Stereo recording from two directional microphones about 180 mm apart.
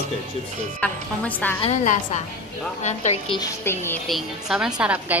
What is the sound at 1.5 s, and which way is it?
A woman's voice, 35° left (ahead or behind).